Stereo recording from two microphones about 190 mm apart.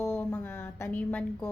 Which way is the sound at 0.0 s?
10° left (ahead or behind).